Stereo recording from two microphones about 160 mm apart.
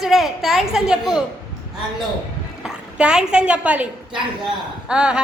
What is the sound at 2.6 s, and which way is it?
A woman's voice, 5° right (ahead or behind).